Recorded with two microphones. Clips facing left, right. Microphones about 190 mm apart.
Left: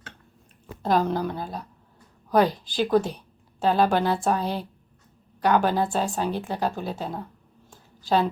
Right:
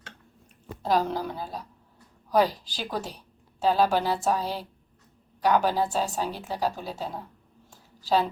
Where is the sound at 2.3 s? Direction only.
55° left (ahead or behind).